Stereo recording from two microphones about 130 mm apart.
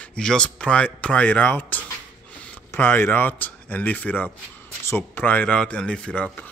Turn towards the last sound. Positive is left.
turn(degrees=10)  # may be behind; listen again after turning